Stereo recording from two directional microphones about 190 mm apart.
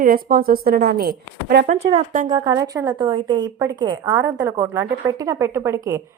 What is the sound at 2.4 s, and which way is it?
A woman's voice, 15° right (ahead or behind).